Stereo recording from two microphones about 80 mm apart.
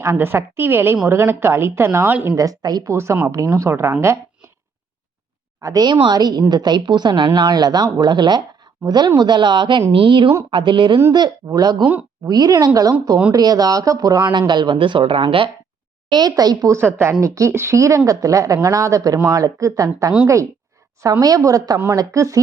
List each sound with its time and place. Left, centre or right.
0.0 s a woman's voice: right
2.2 s speech: right
2.9 s a woman's voice: right
5.5 s speech: right
5.8 s a woman's voice: right
10.5 s speech: right
11.1 s a woman's voice: right
14.3 s speech: right
16.1 s speech: right
16.8 s a woman's voice: right